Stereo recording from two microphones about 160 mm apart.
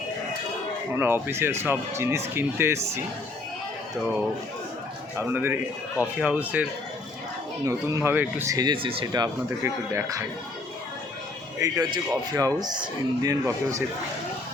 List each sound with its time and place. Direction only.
0.9 s speech: 15° right (ahead or behind)
5.1 s speech: 15° right (ahead or behind)
11.6 s speech: 25° right (ahead or behind)